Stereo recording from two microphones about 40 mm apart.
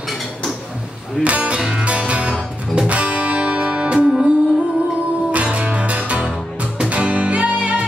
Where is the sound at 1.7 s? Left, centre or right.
Right.